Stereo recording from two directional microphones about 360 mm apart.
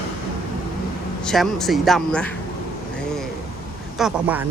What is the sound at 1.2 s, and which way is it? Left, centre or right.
Speech, centre.